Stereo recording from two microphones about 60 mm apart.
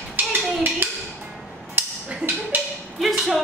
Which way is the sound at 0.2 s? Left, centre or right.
Right.